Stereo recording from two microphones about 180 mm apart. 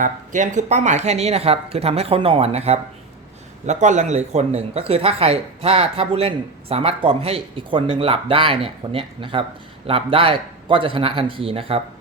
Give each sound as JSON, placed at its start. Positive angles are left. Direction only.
{"t": 0.0, "sound": "a man's voice", "side_deg": -45}